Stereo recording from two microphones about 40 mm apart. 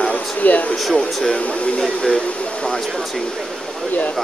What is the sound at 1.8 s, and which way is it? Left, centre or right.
Speech, left.